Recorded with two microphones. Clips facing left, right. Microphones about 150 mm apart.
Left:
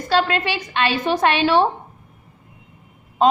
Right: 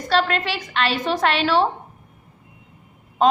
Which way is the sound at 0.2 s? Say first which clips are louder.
Left 1 dB; 15° left (ahead or behind).